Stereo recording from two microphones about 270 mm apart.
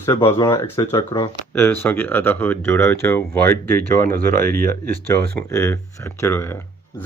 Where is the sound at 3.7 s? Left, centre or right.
Right.